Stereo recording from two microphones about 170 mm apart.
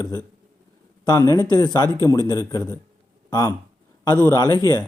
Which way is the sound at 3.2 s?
20° left (ahead or behind).